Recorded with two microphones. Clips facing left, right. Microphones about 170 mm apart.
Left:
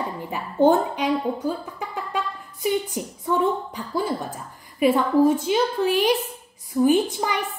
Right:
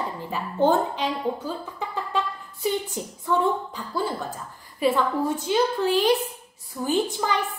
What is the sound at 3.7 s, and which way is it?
A woman's voice, 15° left (ahead or behind).